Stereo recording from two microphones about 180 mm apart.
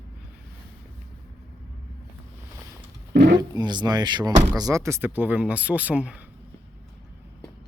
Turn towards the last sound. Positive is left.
turn(degrees=-5)  # may be behind; listen again after turning